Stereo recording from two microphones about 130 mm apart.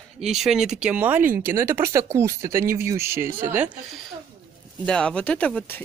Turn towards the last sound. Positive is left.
turn(degrees=10)  # may be behind; listen again after turning